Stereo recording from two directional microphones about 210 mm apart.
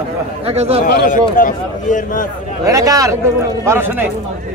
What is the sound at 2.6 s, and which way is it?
Speech, 15° right (ahead or behind).